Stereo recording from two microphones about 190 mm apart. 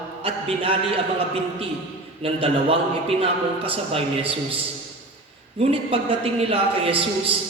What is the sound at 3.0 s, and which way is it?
A man's voice, 30° right (ahead or behind).